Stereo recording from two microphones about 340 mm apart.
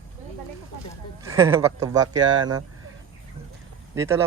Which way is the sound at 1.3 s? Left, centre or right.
Centre.